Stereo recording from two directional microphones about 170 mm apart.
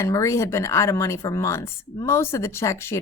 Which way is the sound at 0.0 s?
15° left (ahead or behind).